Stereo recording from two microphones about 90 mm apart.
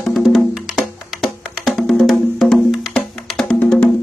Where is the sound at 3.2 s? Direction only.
5° left (ahead or behind).